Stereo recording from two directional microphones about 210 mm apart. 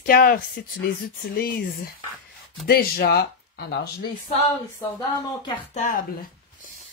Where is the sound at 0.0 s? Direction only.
45° left (ahead or behind).